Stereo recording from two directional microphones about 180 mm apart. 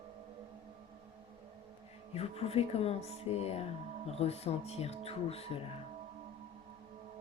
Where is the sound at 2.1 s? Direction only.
35° left (ahead or behind).